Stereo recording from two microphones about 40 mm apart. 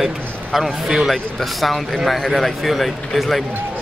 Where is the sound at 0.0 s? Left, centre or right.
Centre.